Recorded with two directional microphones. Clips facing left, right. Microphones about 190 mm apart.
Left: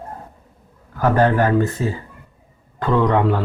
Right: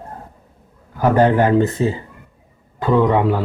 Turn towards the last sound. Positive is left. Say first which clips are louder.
# right 2 dB
turn(degrees=-10)  # may be behind; listen again after turning